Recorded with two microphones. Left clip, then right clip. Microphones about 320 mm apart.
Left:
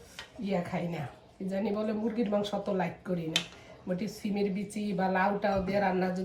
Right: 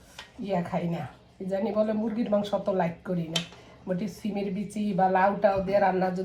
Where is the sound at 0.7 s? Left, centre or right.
Centre.